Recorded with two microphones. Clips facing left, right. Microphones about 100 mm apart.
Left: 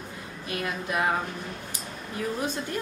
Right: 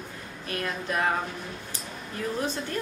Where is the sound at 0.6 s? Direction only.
10° left (ahead or behind).